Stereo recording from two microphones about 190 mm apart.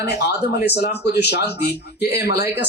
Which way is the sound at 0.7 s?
60° left (ahead or behind).